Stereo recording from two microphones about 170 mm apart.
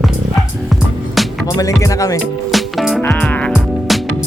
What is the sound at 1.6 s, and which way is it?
Speech, 20° left (ahead or behind).